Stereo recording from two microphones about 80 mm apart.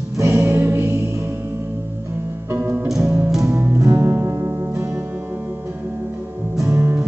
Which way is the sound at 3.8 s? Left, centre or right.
Right.